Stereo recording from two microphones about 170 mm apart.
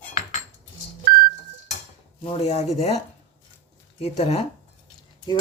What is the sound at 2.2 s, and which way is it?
Speech, 35° left (ahead or behind).